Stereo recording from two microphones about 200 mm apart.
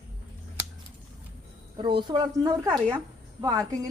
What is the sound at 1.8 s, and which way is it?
Speech, 25° right (ahead or behind).